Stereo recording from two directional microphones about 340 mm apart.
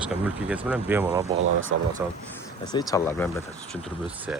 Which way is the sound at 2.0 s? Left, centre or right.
Centre.